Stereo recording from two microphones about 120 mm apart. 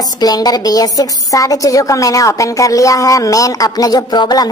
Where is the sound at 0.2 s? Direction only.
35° left (ahead or behind).